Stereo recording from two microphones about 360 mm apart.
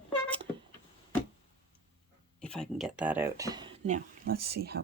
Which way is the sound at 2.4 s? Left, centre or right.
Centre.